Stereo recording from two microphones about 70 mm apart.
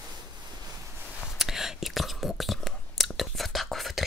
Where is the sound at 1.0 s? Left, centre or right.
Centre.